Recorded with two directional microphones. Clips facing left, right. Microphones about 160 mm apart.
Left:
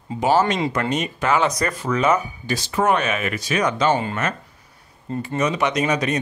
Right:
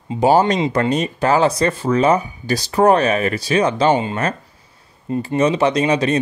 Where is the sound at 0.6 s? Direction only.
25° right (ahead or behind).